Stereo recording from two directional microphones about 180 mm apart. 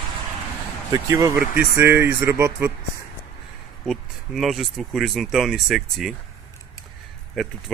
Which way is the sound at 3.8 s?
Centre (ahead or behind).